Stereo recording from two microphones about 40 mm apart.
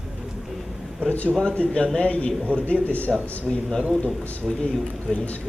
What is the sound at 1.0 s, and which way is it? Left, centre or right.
A man's voice, left.